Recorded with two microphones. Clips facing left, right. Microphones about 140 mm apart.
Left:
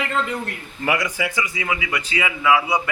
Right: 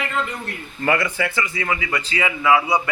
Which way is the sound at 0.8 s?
10° left (ahead or behind).